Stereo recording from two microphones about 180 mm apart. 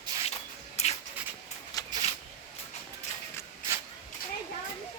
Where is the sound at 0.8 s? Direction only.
35° left (ahead or behind).